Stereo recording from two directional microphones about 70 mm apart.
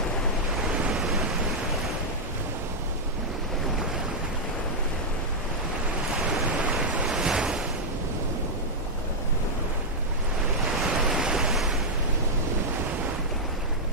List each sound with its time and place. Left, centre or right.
6.6 s waves: centre
10.8 s waves: centre